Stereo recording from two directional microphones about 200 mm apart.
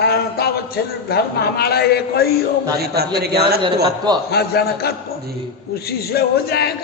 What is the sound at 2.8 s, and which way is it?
Speech, 50° right (ahead or behind).